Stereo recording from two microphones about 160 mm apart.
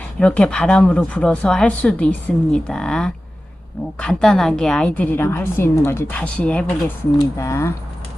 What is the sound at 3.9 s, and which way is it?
A woman's voice, 5° left (ahead or behind).